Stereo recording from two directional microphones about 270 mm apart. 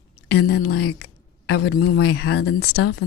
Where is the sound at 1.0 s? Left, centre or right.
Left.